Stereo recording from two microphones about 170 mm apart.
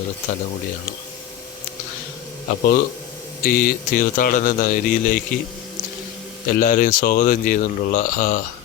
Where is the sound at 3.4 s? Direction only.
55° left (ahead or behind).